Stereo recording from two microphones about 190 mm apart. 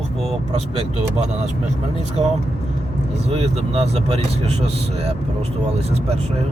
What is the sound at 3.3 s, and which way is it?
Speech, 35° right (ahead or behind).